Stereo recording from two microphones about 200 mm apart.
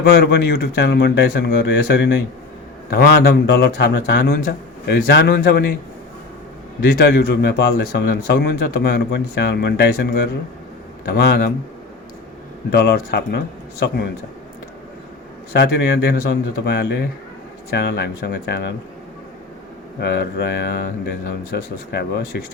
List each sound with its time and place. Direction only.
0.0 s a man's voice: 55° left (ahead or behind)
6.8 s a man's voice: 50° left (ahead or behind)
12.7 s speech: 55° left (ahead or behind)
15.5 s speech: 55° left (ahead or behind)
20.0 s speech: 55° left (ahead or behind)